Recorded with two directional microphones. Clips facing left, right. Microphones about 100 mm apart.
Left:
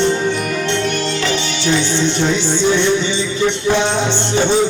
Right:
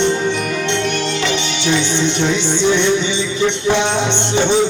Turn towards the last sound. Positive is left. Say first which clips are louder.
# even
turn(degrees=-20)  # may be behind; listen again after turning